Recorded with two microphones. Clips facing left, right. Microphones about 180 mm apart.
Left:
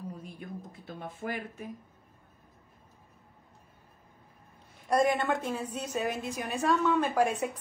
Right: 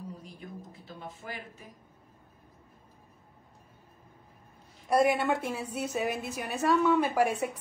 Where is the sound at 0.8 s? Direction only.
55° left (ahead or behind).